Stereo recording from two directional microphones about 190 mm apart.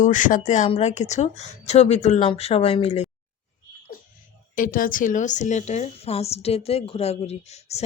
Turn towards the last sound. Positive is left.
turn(degrees=35)  # may be behind; listen again after turning